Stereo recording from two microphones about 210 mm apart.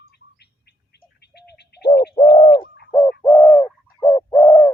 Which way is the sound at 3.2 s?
20° left (ahead or behind).